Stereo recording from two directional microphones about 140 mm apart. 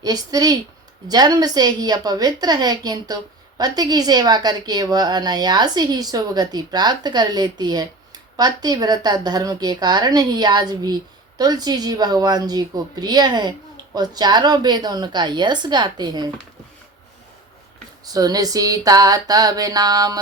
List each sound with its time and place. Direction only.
0.0 s a woman's voice: 25° right (ahead or behind)
18.0 s a woman's voice: 25° right (ahead or behind)